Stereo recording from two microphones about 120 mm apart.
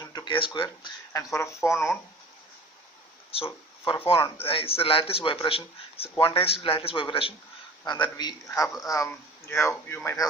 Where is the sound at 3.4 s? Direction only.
50° left (ahead or behind).